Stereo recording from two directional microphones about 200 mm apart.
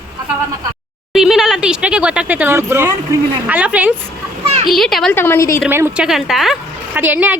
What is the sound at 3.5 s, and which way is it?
Speech, 5° right (ahead or behind).